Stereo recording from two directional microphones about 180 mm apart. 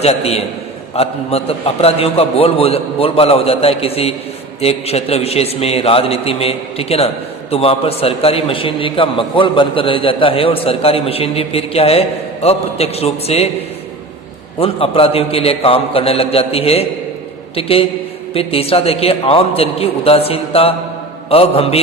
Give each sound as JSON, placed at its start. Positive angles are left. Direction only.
{"t": 0.0, "sound": "a man's voice", "side_deg": 35}
{"t": 14.6, "sound": "a man's voice", "side_deg": 30}